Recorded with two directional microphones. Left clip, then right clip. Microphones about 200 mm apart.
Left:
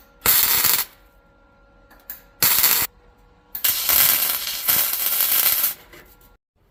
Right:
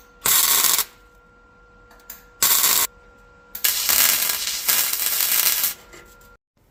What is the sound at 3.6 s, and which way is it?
Ratchet, 15° left (ahead or behind).